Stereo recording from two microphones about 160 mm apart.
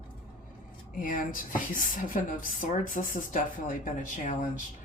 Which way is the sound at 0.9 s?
55° left (ahead or behind).